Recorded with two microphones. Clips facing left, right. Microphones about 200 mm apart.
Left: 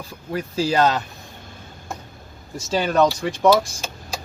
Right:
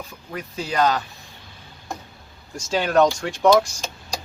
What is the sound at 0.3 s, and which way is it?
Speech, 30° left (ahead or behind).